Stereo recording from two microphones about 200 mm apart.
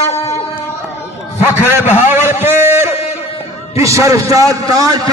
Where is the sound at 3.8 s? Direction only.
15° right (ahead or behind).